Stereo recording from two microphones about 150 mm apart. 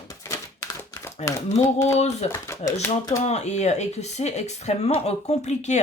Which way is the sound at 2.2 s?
45° left (ahead or behind).